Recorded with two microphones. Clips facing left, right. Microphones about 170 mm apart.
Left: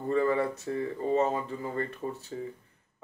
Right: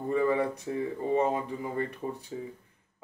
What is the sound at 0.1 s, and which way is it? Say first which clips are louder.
Speech: even; 15° right (ahead or behind).